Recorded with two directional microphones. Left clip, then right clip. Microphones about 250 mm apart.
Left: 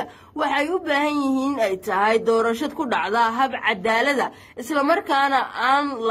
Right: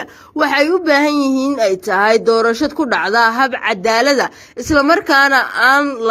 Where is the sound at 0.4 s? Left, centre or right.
Right.